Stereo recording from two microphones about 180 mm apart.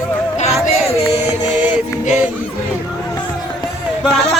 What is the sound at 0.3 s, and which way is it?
Music, 40° left (ahead or behind).